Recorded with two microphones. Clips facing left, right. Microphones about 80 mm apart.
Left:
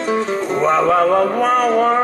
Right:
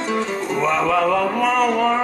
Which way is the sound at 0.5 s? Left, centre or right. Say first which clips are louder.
Left 4 dB; left.